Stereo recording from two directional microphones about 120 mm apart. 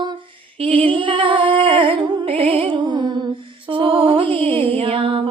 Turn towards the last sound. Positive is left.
turn(degrees=-50)  # may be behind; listen again after turning